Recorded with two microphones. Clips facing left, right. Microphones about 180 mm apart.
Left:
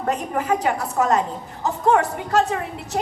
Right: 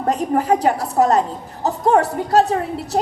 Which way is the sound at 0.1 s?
35° right (ahead or behind).